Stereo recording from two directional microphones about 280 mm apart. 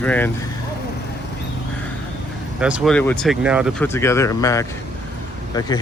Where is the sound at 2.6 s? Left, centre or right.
Centre.